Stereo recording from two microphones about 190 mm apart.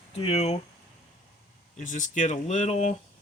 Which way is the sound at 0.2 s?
35° left (ahead or behind).